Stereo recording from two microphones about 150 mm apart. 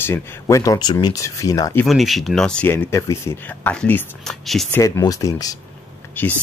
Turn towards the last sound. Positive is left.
turn(degrees=10)  # may be behind; listen again after turning